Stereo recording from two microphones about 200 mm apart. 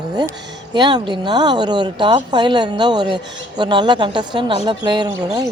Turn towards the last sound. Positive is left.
turn(degrees=-20)  # may be behind; listen again after turning